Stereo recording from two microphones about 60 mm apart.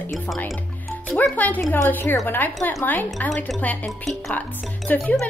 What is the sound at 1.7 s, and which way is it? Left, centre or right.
Speech, left.